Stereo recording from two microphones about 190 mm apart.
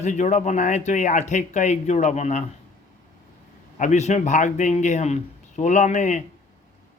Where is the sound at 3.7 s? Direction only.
40° left (ahead or behind).